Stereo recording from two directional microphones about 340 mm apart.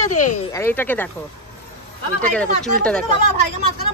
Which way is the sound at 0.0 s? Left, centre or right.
Left.